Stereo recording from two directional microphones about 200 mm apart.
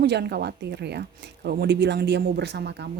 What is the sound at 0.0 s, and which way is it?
Speech, 55° right (ahead or behind).